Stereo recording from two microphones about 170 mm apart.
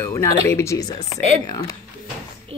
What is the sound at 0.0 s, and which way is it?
A woman's voice, 15° left (ahead or behind).